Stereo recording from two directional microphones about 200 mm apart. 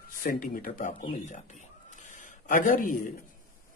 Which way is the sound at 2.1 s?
40° left (ahead or behind).